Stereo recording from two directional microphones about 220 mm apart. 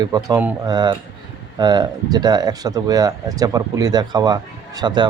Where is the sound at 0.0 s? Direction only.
15° right (ahead or behind).